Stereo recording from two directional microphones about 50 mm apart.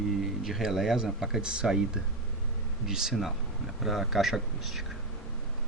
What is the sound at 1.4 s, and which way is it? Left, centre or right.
Speech, centre.